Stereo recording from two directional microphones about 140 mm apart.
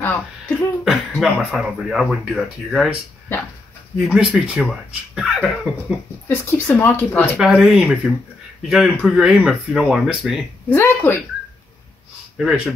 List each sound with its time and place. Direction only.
0.0 s speech: 15° left (ahead or behind)
1.1 s speech: centre (ahead or behind)
4.0 s speech: 5° right (ahead or behind)
6.2 s speech: 20° left (ahead or behind)
7.3 s speech: 5° right (ahead or behind)
10.7 s speech: 15° left (ahead or behind)
12.4 s speech: centre (ahead or behind)